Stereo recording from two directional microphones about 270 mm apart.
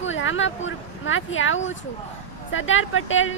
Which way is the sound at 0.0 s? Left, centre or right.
Left.